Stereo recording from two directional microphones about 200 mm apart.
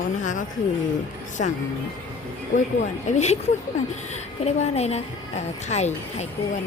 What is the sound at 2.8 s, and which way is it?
A woman's voice, 35° left (ahead or behind).